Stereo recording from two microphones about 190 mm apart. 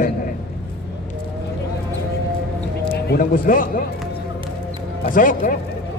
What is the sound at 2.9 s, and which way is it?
Speech, 50° left (ahead or behind).